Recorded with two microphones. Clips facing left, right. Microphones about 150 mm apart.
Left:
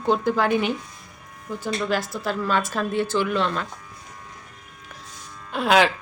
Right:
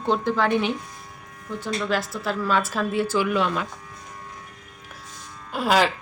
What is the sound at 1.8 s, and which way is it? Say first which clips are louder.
Speech: even; centre (ahead or behind).